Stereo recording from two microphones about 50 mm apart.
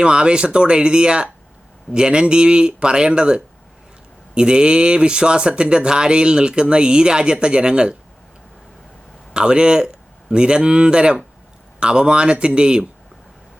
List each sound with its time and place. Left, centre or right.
0.0 s speech: centre
9.3 s a man's voice: centre